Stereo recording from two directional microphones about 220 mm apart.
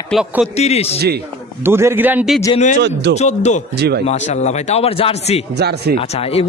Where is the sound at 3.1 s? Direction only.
30° left (ahead or behind).